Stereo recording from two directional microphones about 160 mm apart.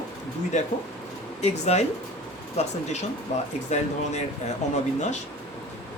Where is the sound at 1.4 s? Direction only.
45° left (ahead or behind).